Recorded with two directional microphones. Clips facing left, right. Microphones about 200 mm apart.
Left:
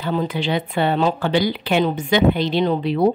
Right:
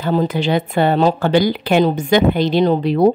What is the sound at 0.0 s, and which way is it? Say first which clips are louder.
A woman's voice: right 5 dB; 40° right (ahead or behind).